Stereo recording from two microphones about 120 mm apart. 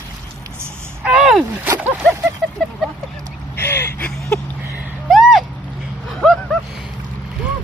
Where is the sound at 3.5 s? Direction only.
20° left (ahead or behind).